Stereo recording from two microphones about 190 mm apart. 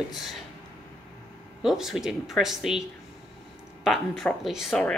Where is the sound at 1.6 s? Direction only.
Centre (ahead or behind).